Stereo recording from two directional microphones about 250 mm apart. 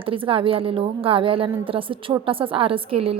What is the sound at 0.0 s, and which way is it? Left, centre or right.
A woman's voice, right.